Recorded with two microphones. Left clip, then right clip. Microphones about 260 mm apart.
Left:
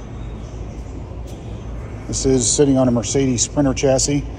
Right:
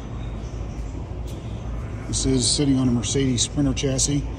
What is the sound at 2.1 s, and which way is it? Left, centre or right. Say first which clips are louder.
Speech: left 5 dB; centre.